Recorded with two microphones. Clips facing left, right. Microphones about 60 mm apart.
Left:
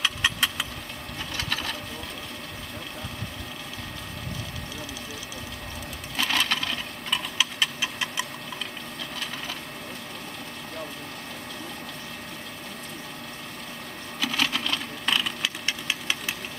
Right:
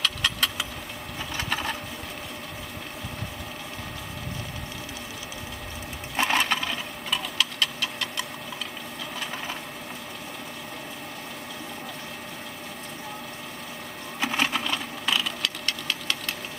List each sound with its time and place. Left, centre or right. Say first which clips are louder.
0.0 s engine: left 1 dB; centre
1.3 s sewing machine: right 2 dB; centre
6.1 s sewing machine: right 2 dB; right
7.1 s tick-tock: even; centre
14.2 s sewing machine: right 1 dB; right
15.0 s a sound: left 1 dB; centre
15.6 s engine: even; centre